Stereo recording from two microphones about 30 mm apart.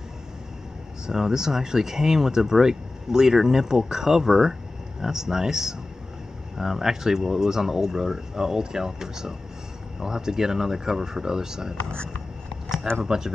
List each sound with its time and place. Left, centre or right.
1.0 s speech: centre
13.0 s speech: centre